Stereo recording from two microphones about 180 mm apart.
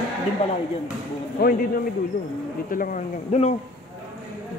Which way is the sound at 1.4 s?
55° left (ahead or behind).